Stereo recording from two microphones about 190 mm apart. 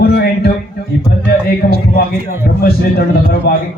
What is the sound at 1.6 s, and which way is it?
A man's voice, 55° left (ahead or behind).